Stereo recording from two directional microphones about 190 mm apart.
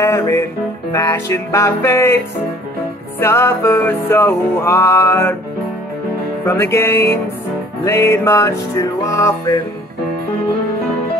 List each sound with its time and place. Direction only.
0.0 s music: 15° left (ahead or behind)
3.2 s music: 10° left (ahead or behind)
6.4 s music: 15° left (ahead or behind)